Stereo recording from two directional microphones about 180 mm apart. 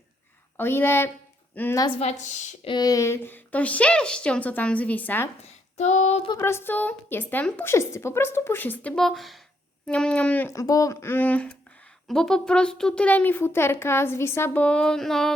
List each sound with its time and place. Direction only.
0.5 s speech: 10° left (ahead or behind)
2.0 s a woman's voice: 40° left (ahead or behind)
2.6 s speech: 20° left (ahead or behind)
5.4 s child singing: 40° left (ahead or behind)
6.3 s speech: 15° left (ahead or behind)